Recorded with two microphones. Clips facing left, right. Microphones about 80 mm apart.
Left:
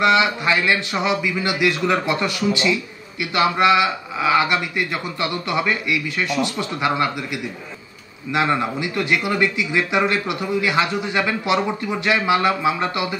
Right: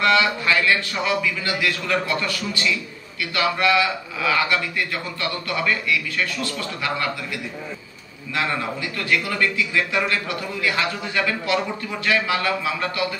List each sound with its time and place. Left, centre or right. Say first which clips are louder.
0.0 s a man's voice: left 2 dB; left
8.3 s a man's voice: left 5 dB; left